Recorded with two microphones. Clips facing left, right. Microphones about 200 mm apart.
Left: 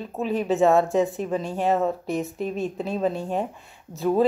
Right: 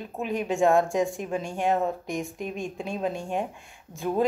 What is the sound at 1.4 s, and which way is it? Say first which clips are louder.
Speech: left 2 dB; 35° left (ahead or behind).